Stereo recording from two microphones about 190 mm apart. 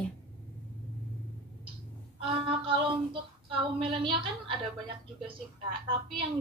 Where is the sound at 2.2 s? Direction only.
25° right (ahead or behind).